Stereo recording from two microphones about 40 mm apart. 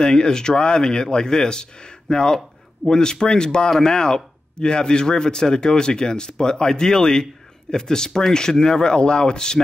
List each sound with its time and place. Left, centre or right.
0.0 s speech: centre